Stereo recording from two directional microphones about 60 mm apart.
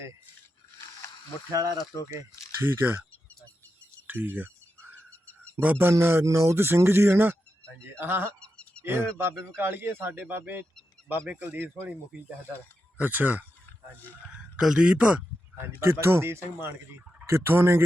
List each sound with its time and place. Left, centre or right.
2.6 s speech: right
4.0 s speech: right
5.5 s speech: right
5.9 s speech: right
6.2 s speech: right
8.4 s a sound: centre
8.8 s speech: right
13.0 s speech: right
14.6 s speech: centre
15.8 s speech: right